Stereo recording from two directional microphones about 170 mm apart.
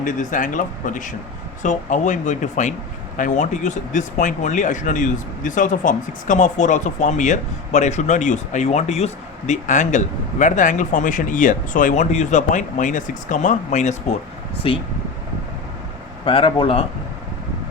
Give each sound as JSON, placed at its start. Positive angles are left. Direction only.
{"t": 0.0, "sound": "speech", "side_deg": 50}
{"t": 14.6, "sound": "speech", "side_deg": 35}
{"t": 16.2, "sound": "speech", "side_deg": 30}